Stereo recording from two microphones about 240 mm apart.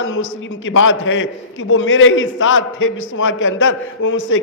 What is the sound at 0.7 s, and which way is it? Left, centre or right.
A man's voice, left.